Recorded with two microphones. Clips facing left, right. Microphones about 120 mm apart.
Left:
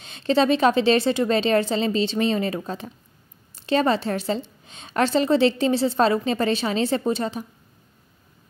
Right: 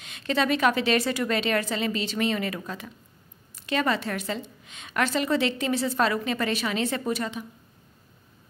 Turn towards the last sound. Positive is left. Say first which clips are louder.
# left 4 dB
turn(degrees=35)  # may be behind; listen again after turning